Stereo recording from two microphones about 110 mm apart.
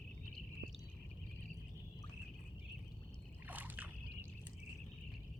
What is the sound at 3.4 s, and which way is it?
Boat, 15° right (ahead or behind).